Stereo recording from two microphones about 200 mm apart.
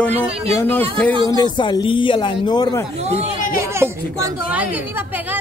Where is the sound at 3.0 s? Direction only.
30° right (ahead or behind).